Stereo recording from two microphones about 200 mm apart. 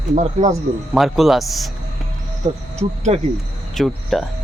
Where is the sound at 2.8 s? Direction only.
35° right (ahead or behind).